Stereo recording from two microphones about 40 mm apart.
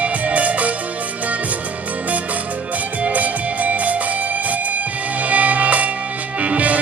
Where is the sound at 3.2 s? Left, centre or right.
Right.